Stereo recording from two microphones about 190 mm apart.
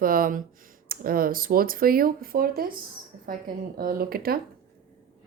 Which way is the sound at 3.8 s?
50° right (ahead or behind).